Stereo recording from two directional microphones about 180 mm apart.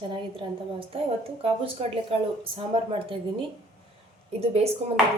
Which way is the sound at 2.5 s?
30° right (ahead or behind).